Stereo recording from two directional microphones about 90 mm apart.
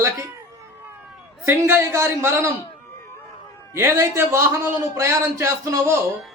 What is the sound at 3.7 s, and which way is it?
A man's voice, 30° right (ahead or behind).